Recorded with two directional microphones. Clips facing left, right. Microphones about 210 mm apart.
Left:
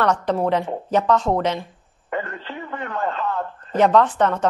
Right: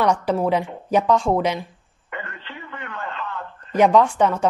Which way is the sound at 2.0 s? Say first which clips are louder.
Left 7 dB; 40° left (ahead or behind).